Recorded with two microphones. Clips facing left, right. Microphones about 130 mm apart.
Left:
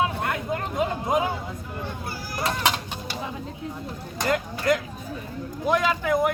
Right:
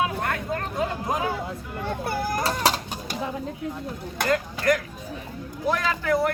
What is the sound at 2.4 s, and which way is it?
Chicken, 35° right (ahead or behind).